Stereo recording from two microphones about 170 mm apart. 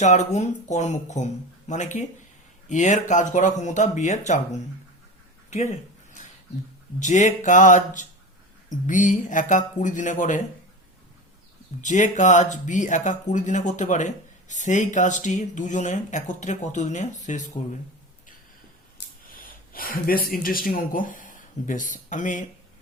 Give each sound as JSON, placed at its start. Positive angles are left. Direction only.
{"t": 0.0, "sound": "speech", "side_deg": 40}
{"t": 7.0, "sound": "speech", "side_deg": 45}
{"t": 11.8, "sound": "speech", "side_deg": 45}
{"t": 18.9, "sound": "speech", "side_deg": 55}